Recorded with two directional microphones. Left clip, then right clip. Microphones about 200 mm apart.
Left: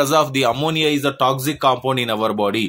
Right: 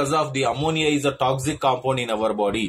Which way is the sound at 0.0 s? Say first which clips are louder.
Left 5 dB; 45° left (ahead or behind).